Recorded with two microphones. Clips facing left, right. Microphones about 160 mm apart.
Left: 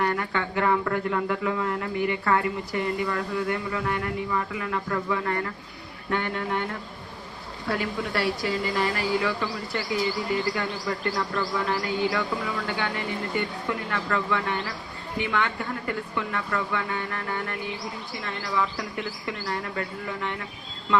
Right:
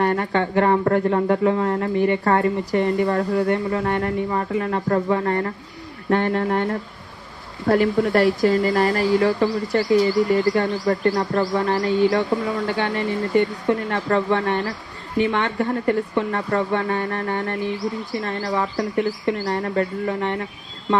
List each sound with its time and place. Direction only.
0.0 s speech: 35° right (ahead or behind)